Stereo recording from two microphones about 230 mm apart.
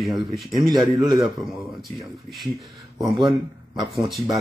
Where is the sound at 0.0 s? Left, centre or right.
Centre.